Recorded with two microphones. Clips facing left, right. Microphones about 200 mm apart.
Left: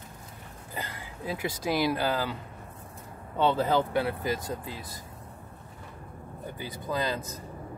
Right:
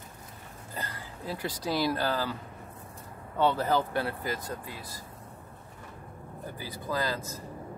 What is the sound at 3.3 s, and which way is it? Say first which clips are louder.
Speech: left 1 dB; 20° left (ahead or behind).